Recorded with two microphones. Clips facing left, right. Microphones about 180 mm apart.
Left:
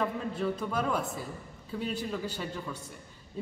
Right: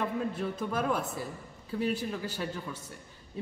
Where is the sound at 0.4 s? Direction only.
5° right (ahead or behind).